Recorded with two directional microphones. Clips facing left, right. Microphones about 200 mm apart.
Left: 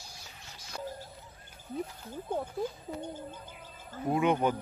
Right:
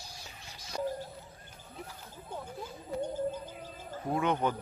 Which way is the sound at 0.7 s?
15° right (ahead or behind).